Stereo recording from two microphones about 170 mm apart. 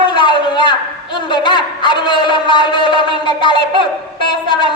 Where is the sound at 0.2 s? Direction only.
30° left (ahead or behind).